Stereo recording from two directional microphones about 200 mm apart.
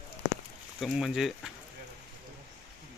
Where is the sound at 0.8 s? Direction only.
Centre (ahead or behind).